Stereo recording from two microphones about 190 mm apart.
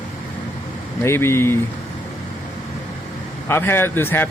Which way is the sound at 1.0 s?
15° left (ahead or behind).